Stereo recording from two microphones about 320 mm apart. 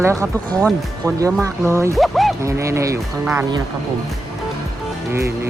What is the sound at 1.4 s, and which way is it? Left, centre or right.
Speech, centre.